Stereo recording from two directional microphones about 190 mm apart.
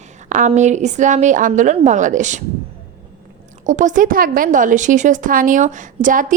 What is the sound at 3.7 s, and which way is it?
A woman's voice, 40° right (ahead or behind).